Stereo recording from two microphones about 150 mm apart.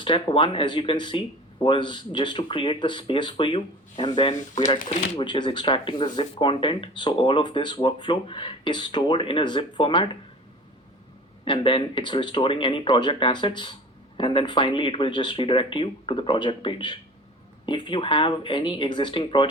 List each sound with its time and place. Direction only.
0.0 s speech: 35° left (ahead or behind)
11.4 s speech: 35° left (ahead or behind)